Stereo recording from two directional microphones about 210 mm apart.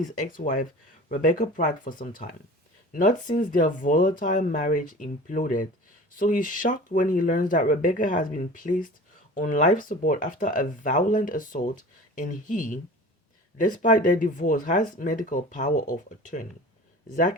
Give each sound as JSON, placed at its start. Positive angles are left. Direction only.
{"t": 0.3, "sound": "speech", "side_deg": 40}